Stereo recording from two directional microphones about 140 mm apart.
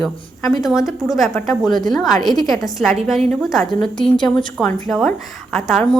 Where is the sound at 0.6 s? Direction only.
Centre (ahead or behind).